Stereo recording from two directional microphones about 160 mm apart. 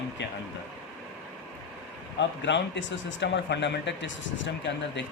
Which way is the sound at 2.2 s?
90° left.